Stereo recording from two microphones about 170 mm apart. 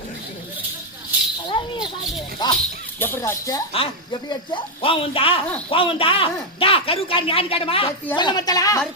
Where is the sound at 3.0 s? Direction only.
15° left (ahead or behind).